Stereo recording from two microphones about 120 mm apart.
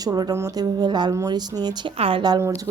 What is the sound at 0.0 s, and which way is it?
Speech, 30° right (ahead or behind).